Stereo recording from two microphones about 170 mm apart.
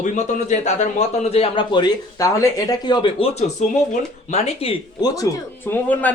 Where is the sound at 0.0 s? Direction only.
45° left (ahead or behind).